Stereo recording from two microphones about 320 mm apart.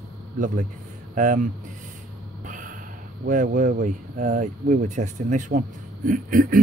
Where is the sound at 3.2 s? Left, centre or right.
Right.